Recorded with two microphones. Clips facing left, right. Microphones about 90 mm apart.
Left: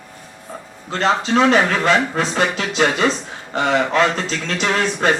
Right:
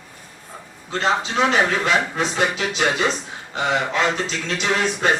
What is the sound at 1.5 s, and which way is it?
A man's voice, 50° left (ahead or behind).